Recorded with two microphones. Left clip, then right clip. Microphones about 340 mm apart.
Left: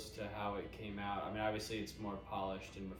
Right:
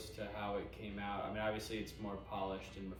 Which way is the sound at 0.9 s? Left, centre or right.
Centre.